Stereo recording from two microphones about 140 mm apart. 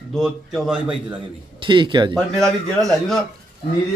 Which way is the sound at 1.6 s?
35° right (ahead or behind).